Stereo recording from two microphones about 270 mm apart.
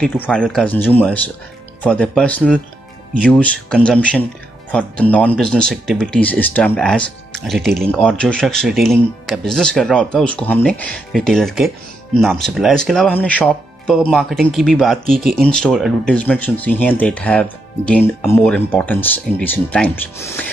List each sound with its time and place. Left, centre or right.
0.0 s speech: centre